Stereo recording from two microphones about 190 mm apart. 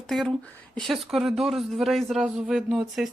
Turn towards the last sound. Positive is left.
turn(degrees=0)  # may be behind; listen again after turning